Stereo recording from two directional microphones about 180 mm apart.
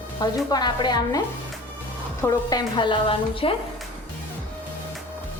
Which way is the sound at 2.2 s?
20° left (ahead or behind).